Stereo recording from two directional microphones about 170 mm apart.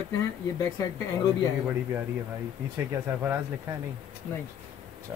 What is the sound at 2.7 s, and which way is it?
Speech, 15° right (ahead or behind).